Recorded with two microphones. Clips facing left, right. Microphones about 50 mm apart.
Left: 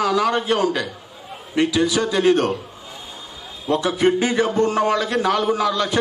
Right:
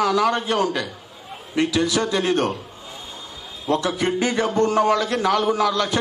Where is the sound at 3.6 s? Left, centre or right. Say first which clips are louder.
Left 3 dB; centre.